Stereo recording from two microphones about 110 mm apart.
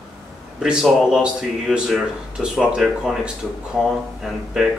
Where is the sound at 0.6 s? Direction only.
5° right (ahead or behind).